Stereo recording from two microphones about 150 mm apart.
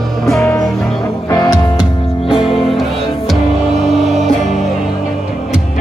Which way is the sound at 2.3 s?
Centre (ahead or behind).